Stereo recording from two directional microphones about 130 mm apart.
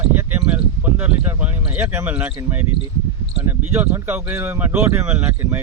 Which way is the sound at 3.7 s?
15° right (ahead or behind).